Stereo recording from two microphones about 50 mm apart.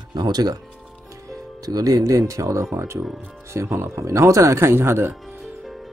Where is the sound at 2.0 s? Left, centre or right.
Right.